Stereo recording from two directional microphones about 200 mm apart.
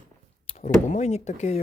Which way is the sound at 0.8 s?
35° left (ahead or behind).